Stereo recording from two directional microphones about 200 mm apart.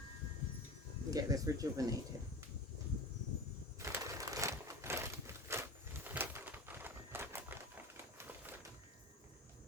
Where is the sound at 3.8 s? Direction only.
15° right (ahead or behind).